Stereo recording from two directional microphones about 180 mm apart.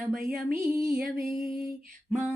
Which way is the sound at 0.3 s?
55° right (ahead or behind).